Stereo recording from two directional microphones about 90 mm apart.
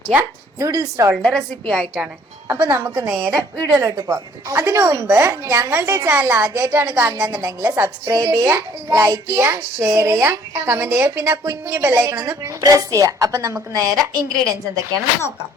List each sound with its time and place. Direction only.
0.2 s a child's voice: 35° right (ahead or behind)
1.2 s a woman's voice: 10° left (ahead or behind)
2.6 s a child's voice: 30° right (ahead or behind)
3.2 s a woman's voice: 25° right (ahead or behind)
3.8 s a child's voice: 40° right (ahead or behind); by 7.3 s 25° right (ahead or behind)
7.3 s a child's voice: 40° right (ahead or behind)